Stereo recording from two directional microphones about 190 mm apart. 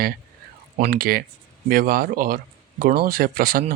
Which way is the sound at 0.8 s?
50° right (ahead or behind).